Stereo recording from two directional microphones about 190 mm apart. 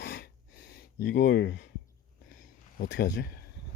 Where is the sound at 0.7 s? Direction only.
60° left (ahead or behind).